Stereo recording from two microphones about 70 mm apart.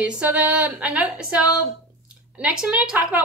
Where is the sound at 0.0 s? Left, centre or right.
Centre.